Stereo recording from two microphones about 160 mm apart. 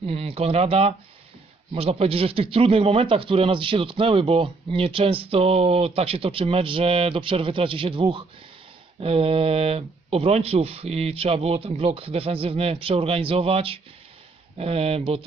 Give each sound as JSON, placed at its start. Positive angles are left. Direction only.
{"t": 0.0, "sound": "a man's voice", "side_deg": -35}